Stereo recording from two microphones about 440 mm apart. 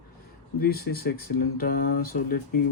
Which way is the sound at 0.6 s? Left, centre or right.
Left.